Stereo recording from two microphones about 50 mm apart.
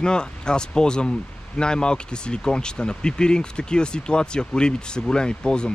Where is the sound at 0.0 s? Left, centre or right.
Centre.